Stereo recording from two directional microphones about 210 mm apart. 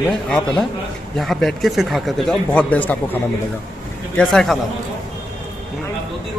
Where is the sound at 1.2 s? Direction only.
Centre (ahead or behind).